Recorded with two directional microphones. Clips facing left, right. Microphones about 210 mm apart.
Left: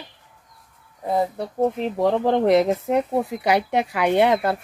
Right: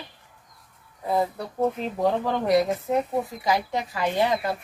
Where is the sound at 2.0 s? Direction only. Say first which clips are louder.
Left 5 dB; 65° left (ahead or behind).